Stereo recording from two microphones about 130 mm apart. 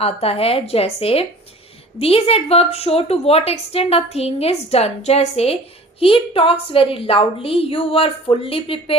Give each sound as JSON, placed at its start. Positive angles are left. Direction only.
{"t": 0.0, "sound": "a woman's voice", "side_deg": 50}